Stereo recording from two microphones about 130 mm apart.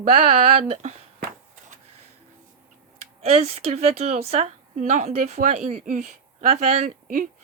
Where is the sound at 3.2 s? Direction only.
55° right (ahead or behind); by 7.2 s 80° right.